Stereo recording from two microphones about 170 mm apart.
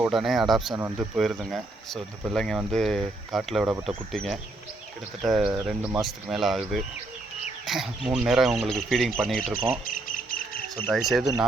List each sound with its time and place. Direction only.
0.0 s speech: centre (ahead or behind)
0.7 s speech: 15° right (ahead or behind)
1.1 s speech: centre (ahead or behind)
9.5 s speech: 10° right (ahead or behind)
9.8 s bird: 50° left (ahead or behind)
10.8 s speech: centre (ahead or behind)